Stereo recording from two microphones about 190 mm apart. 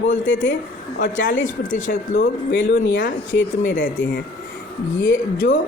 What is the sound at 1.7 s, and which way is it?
Speech, 45° left (ahead or behind).